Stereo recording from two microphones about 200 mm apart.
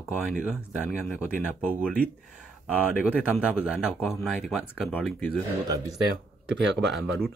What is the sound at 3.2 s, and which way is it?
Speech, 5° right (ahead or behind).